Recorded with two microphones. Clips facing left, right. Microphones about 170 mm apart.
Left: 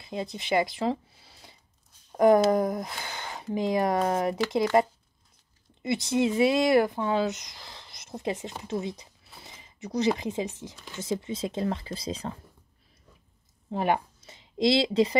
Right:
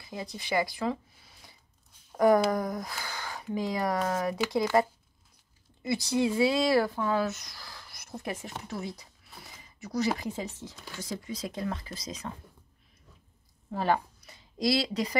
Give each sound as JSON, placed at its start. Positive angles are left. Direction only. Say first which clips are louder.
{"t": 0.0, "sound": "speech", "louder": "left 5 dB", "side_deg": 20}
{"t": 13.7, "sound": "speech", "louder": "left 2 dB", "side_deg": 15}